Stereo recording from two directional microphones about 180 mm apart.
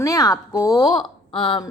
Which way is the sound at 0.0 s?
20° left (ahead or behind).